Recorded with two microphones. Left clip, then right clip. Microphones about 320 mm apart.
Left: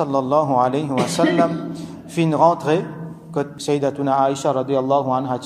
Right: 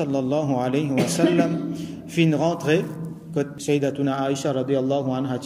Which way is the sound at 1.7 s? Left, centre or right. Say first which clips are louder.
Even; centre.